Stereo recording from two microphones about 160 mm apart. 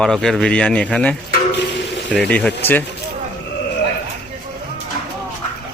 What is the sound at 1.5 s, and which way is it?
Stir, 90° left.